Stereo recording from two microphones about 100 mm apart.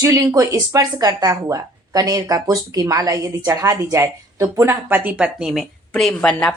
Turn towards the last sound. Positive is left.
turn(degrees=5)  # may be behind; listen again after turning